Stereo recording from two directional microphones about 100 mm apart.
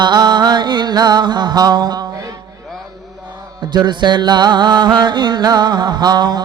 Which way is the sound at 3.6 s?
45° right (ahead or behind).